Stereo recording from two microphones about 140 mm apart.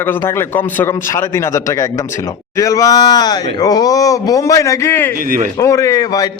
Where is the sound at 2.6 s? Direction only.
25° left (ahead or behind).